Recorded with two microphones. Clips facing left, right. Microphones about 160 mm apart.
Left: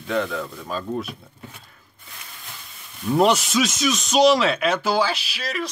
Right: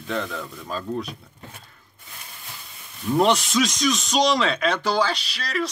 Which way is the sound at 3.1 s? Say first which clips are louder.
Left 1 dB; centre (ahead or behind).